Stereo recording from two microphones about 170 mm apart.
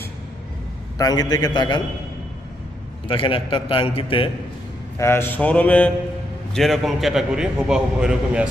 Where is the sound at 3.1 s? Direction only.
30° left (ahead or behind).